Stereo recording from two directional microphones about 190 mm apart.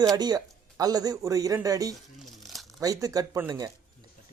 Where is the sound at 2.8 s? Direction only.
20° right (ahead or behind).